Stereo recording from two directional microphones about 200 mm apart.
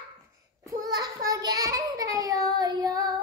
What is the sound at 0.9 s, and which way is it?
Child singing, 20° right (ahead or behind).